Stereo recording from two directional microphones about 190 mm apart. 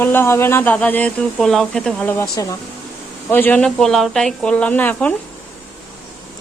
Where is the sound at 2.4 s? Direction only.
20° left (ahead or behind).